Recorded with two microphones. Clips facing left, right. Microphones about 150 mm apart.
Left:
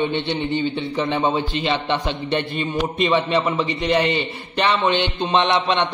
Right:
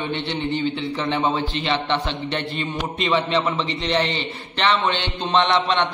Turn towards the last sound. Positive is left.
turn(degrees=15)  # may be behind; listen again after turning